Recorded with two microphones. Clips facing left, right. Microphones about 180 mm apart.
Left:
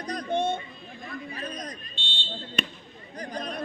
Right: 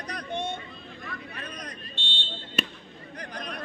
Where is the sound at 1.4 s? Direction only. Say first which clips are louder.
Left 5 dB; 35° left (ahead or behind).